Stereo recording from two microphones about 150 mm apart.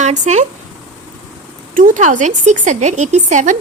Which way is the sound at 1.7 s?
60° right (ahead or behind).